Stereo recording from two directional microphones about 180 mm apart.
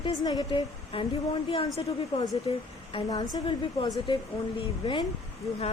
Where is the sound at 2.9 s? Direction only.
25° left (ahead or behind).